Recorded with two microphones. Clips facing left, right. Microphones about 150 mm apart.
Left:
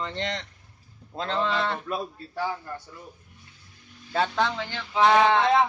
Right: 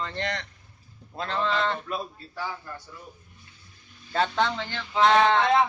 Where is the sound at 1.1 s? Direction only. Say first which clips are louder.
Left 2 dB; 25° left (ahead or behind).